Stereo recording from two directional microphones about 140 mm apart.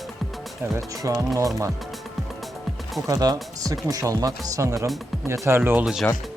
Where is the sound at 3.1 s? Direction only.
25° right (ahead or behind); by 6.1 s 5° right (ahead or behind).